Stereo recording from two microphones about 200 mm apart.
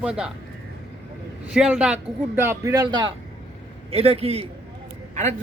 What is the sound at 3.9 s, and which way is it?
Speech, 30° right (ahead or behind).